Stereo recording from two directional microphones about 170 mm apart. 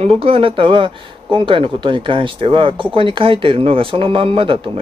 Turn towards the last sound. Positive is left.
turn(degrees=-30)  # may be behind; listen again after turning